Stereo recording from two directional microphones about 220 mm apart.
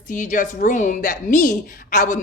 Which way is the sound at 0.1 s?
35° left (ahead or behind).